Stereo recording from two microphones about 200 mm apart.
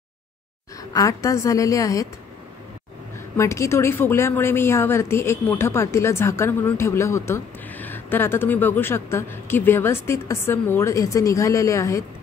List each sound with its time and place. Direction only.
0.9 s a woman's voice: 15° left (ahead or behind)
3.3 s a woman's voice: 15° left (ahead or behind)